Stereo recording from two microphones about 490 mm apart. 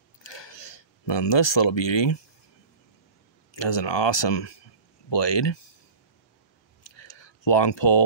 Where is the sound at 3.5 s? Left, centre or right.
Left.